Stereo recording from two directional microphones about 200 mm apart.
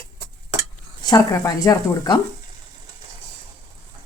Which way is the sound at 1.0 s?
20° left (ahead or behind).